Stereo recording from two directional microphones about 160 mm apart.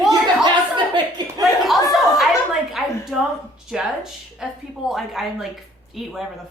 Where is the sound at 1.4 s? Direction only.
Centre (ahead or behind).